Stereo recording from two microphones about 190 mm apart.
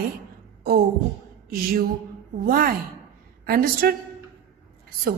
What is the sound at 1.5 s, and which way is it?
Speech, 50° right (ahead or behind).